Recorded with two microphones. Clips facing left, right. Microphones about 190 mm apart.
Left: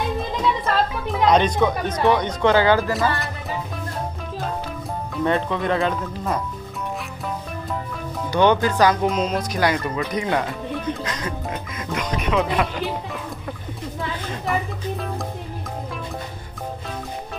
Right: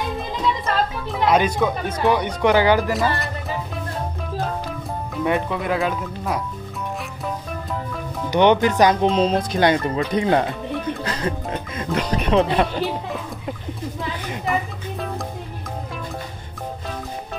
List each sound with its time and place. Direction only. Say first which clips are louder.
1.1 s speech: left 1 dB; 5° right (ahead or behind)
2.9 s speech: right 1 dB; centre (ahead or behind)
5.2 s speech: left 1 dB; 10° right (ahead or behind)
8.3 s speech: right 2 dB; 20° right (ahead or behind)
14.4 s music: even; centre (ahead or behind)